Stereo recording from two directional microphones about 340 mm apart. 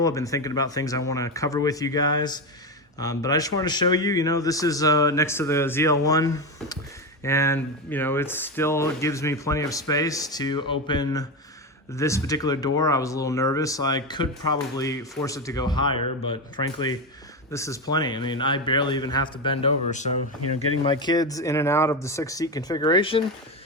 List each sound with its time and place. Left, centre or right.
0.0 s speech: centre
20.4 s speech: left
20.8 s speech: centre